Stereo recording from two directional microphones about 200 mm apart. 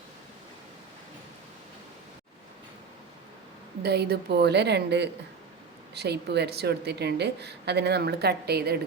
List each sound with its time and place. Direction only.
3.8 s a woman's voice: 55° right (ahead or behind)